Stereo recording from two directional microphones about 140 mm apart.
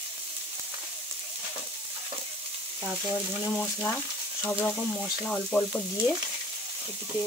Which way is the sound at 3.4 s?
15° left (ahead or behind).